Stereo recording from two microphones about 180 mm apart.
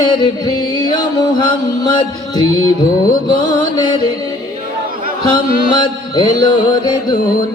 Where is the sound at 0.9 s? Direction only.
25° left (ahead or behind).